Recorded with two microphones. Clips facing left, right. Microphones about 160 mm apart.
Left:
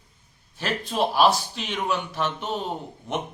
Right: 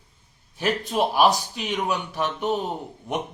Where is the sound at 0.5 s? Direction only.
15° right (ahead or behind).